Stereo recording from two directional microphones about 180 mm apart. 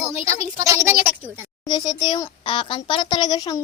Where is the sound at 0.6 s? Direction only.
15° right (ahead or behind).